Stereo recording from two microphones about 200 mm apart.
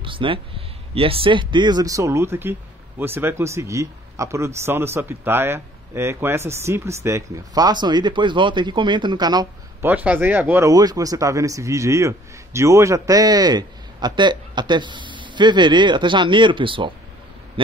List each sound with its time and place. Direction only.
0.0 s speech: 25° right (ahead or behind)